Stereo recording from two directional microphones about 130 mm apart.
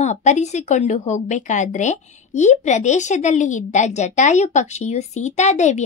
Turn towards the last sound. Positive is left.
turn(degrees=65)  # may be behind; listen again after turning